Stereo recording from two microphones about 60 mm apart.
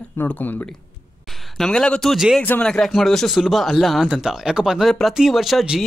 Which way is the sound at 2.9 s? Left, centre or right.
Centre.